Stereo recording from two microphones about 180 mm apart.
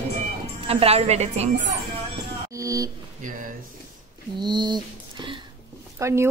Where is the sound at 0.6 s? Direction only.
35° right (ahead or behind).